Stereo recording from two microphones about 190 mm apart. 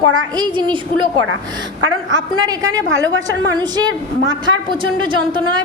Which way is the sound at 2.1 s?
20° right (ahead or behind).